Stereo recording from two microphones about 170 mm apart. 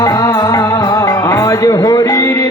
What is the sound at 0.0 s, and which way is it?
Music, 20° left (ahead or behind).